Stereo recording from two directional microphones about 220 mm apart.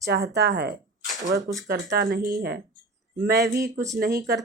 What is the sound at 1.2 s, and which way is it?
Speech, 15° right (ahead or behind).